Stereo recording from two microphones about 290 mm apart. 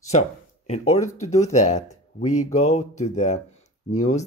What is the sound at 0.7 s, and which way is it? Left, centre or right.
Speech, left.